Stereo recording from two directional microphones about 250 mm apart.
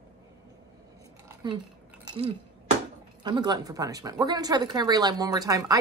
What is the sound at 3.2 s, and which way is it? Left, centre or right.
Speech, centre.